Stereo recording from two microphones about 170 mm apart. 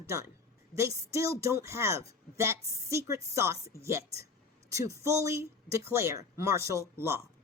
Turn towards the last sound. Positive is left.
turn(degrees=-15)  # may be behind; listen again after turning